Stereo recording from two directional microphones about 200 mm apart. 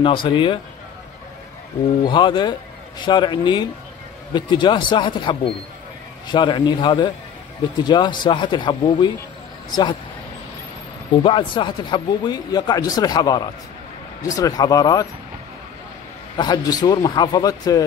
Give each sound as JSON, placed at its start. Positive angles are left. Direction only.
{"t": 0.0, "sound": "speech", "side_deg": 25}
{"t": 2.0, "sound": "speech", "side_deg": 25}
{"t": 11.2, "sound": "speech", "side_deg": 25}
{"t": 16.3, "sound": "speech", "side_deg": 20}